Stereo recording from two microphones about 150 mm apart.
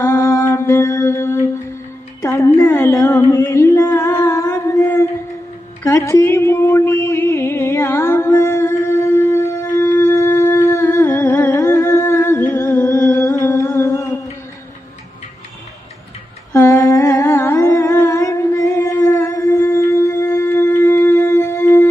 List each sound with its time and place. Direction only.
0.0 s humming: 15° left (ahead or behind)
2.2 s music: 20° left (ahead or behind)
2.6 s singing: 15° left (ahead or behind)
5.8 s music: 20° left (ahead or behind)
16.5 s humming: 20° left (ahead or behind)